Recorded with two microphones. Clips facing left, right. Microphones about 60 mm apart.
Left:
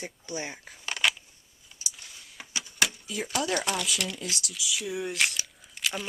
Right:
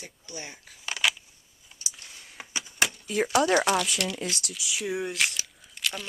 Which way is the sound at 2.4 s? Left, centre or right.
Centre.